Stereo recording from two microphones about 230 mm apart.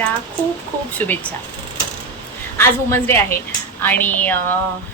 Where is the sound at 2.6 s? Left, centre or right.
Centre.